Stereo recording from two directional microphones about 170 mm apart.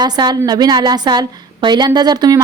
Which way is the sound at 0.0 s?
25° right (ahead or behind).